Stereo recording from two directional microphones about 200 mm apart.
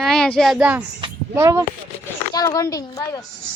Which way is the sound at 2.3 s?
15° left (ahead or behind).